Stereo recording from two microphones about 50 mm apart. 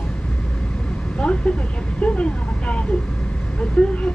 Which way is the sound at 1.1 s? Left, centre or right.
Left.